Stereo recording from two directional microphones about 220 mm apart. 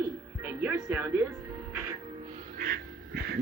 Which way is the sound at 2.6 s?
40° right (ahead or behind).